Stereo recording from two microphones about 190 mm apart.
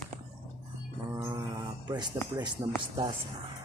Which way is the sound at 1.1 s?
15° right (ahead or behind).